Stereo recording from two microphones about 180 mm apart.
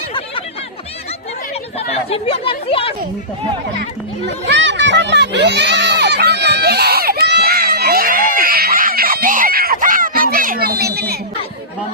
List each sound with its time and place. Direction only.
1.9 s speech: 35° left (ahead or behind)
4.3 s crowd: 75° right (ahead or behind); by 11.2 s 60° right (ahead or behind)